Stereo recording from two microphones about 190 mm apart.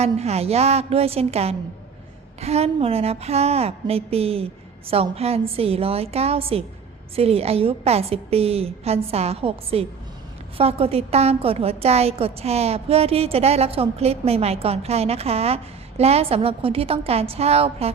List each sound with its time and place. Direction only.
0.0 s a woman's voice: 35° right (ahead or behind)